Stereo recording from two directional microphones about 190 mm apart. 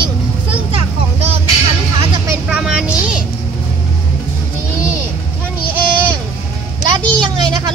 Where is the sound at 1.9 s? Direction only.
25° right (ahead or behind).